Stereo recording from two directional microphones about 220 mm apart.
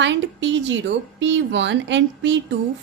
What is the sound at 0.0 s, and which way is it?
A woman's voice, 55° right (ahead or behind).